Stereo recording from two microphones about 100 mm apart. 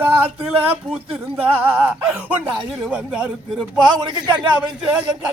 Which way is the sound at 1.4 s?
20° right (ahead or behind).